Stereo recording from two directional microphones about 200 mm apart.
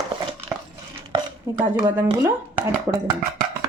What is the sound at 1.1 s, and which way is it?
Speech, 15° right (ahead or behind).